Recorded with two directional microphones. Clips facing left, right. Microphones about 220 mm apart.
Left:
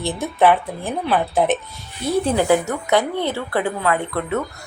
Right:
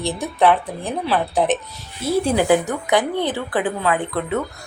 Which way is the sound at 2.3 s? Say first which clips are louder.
Right 1 dB; 15° right (ahead or behind).